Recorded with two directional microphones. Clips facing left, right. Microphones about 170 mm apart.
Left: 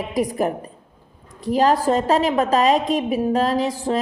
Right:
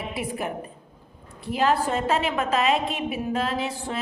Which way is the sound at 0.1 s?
40° left (ahead or behind).